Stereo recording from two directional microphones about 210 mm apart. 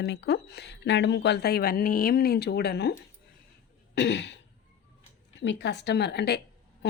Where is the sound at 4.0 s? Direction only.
55° left (ahead or behind).